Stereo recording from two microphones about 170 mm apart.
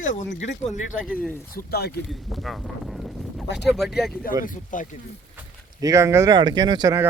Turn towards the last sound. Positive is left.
turn(degrees=-20)  # may be behind; listen again after turning